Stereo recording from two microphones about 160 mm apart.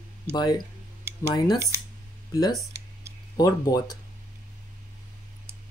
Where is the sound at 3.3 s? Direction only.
25° left (ahead or behind).